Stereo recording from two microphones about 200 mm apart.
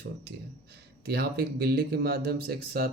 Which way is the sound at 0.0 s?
55° right (ahead or behind).